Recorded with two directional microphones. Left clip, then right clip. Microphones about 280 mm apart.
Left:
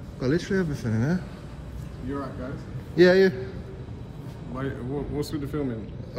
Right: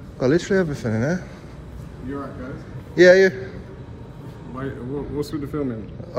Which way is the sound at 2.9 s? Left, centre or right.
Centre.